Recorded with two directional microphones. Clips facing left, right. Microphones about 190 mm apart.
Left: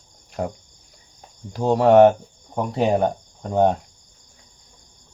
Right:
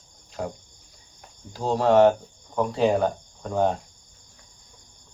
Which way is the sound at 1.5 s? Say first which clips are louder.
Left 5 dB; 60° left (ahead or behind).